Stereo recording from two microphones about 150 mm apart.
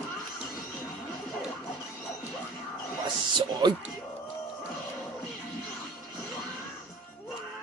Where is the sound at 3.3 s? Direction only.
30° right (ahead or behind).